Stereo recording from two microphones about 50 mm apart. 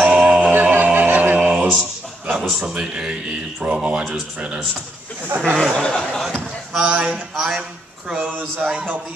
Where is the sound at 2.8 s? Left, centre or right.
Right.